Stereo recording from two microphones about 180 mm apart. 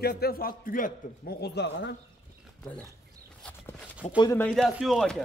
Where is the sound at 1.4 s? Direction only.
70° left (ahead or behind).